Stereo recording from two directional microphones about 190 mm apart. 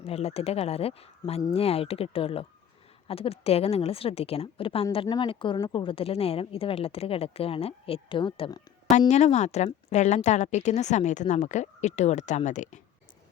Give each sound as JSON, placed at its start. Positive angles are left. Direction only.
{"t": 0.0, "sound": "a woman's voice", "side_deg": 30}
{"t": 8.9, "sound": "a woman's voice", "side_deg": 35}